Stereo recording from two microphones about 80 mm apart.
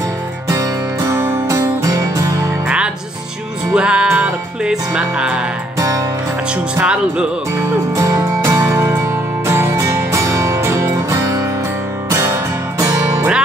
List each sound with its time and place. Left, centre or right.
0.5 s music: right
3.7 s music: centre
5.8 s music: right
6.5 s speech: centre
7.9 s music: right